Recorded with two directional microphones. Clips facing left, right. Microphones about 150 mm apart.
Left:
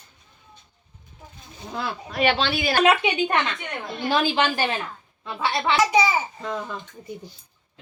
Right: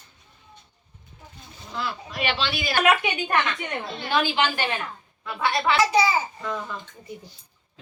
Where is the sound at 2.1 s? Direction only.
50° left (ahead or behind).